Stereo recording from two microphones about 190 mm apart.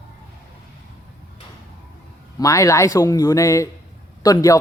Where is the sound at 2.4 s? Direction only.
15° left (ahead or behind).